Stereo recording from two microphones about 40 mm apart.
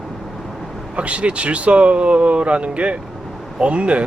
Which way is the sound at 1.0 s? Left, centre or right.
Right.